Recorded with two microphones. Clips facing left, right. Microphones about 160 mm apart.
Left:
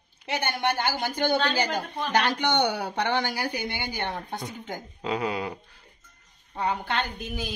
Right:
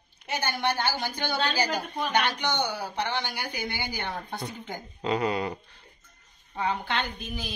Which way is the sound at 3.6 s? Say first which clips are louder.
Left 2 dB; 20° left (ahead or behind).